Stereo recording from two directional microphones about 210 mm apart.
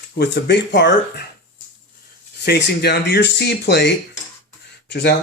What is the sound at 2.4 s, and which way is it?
Speech, 50° left (ahead or behind).